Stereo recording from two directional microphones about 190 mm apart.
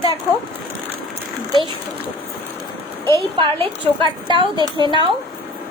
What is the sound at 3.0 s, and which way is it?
A woman's voice, 25° right (ahead or behind).